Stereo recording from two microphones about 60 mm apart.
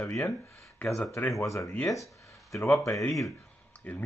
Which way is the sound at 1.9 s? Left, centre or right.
Left.